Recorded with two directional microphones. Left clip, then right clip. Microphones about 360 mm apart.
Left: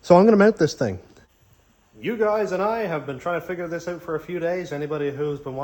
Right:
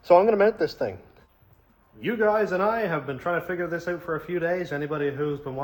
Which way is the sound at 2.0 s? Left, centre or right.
Centre.